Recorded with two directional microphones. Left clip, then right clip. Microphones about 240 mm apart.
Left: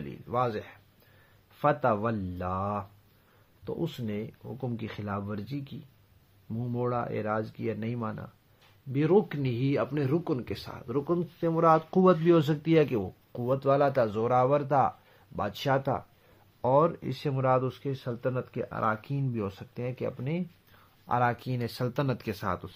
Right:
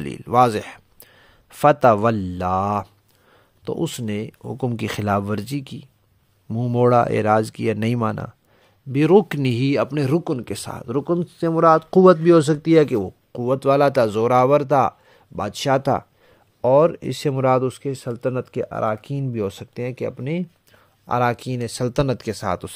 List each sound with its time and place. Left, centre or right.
0.0 s speech: right